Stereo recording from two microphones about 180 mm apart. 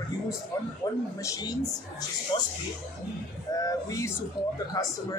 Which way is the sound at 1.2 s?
20° left (ahead or behind).